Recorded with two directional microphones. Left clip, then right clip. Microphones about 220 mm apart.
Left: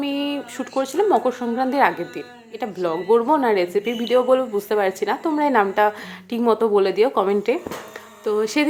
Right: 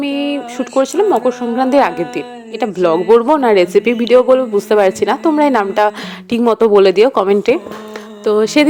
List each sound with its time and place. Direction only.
0.0 s a woman's voice: 30° right (ahead or behind)